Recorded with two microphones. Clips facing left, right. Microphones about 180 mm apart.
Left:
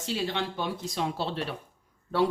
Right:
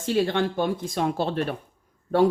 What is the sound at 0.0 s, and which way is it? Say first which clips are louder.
Speech: right 8 dB; 50° right (ahead or behind).